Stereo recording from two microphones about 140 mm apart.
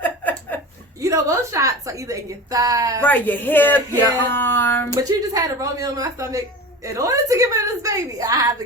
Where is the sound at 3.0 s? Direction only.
15° left (ahead or behind).